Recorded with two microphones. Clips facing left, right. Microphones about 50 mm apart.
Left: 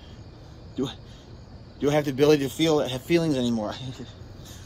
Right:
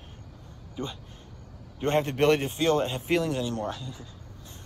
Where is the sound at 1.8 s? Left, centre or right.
Right.